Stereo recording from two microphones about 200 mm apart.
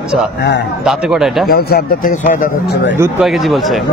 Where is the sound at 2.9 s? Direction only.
10° right (ahead or behind).